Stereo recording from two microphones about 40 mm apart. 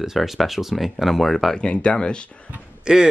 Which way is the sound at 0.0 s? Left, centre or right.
Centre.